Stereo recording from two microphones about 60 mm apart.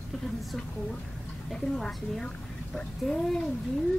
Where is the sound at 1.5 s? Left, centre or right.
Centre.